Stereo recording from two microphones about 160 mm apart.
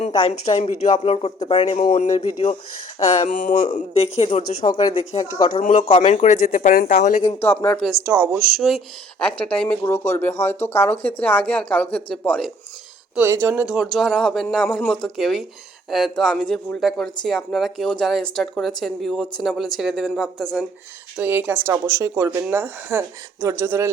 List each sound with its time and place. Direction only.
0.3 s speech: 45° left (ahead or behind)
3.8 s speech: 40° left (ahead or behind)
7.4 s speech: 10° left (ahead or behind)
8.0 s speech: 15° right (ahead or behind)
8.5 s speech: centre (ahead or behind)
13.1 s speech: 15° right (ahead or behind)
13.7 s speech: centre (ahead or behind)
21.2 s speech: 10° right (ahead or behind)